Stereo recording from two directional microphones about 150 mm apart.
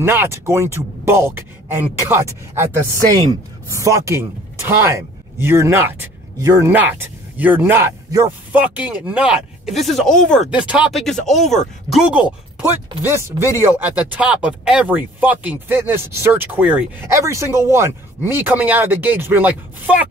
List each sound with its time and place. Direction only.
0.0 s speech: 15° right (ahead or behind)
8.5 s speech: 10° right (ahead or behind)
10.5 s speech: 5° right (ahead or behind)